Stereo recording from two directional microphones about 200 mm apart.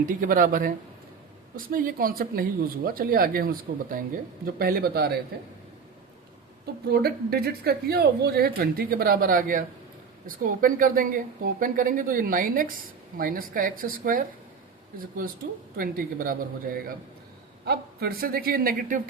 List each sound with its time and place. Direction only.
0.0 s speech: 45° right (ahead or behind)
6.8 s speech: 50° right (ahead or behind)
15.8 s speech: 45° right (ahead or behind)